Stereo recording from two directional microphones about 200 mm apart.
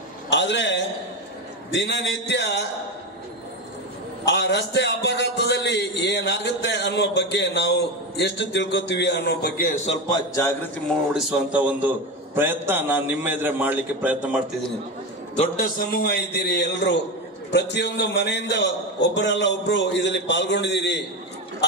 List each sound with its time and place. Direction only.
0.3 s a man's voice: 60° left (ahead or behind)
4.3 s a man's voice: 60° left (ahead or behind)
9.8 s a man's voice: 25° left (ahead or behind)
11.1 s a man's voice: 5° right (ahead or behind)
15.3 s a man's voice: 40° left (ahead or behind); by 21.0 s 60° left (ahead or behind)